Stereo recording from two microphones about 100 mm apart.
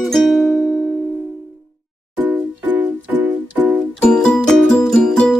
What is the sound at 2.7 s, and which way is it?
Music, 15° right (ahead or behind).